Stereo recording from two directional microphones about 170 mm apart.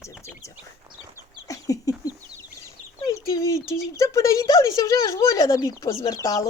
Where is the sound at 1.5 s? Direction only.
20° left (ahead or behind).